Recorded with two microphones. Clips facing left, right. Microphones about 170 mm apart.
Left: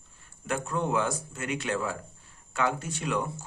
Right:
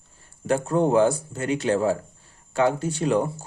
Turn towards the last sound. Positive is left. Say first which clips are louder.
# right 8 dB
turn(degrees=-35)  # may be behind; listen again after turning